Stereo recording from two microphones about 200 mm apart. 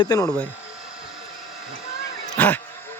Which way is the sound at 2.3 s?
10° left (ahead or behind).